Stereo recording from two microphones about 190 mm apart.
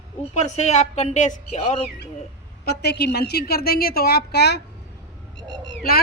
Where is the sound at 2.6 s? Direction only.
60° left (ahead or behind).